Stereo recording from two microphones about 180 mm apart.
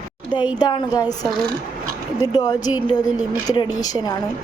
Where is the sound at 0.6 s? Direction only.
25° left (ahead or behind).